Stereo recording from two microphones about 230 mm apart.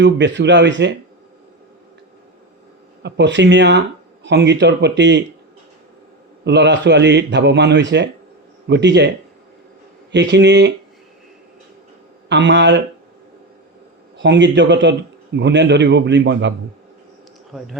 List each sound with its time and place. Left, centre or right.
0.0 s a man's voice: right
3.0 s a man's voice: right
6.4 s a man's voice: right
10.1 s a man's voice: right
12.3 s a man's voice: right
14.2 s a man's voice: right
17.5 s speech: centre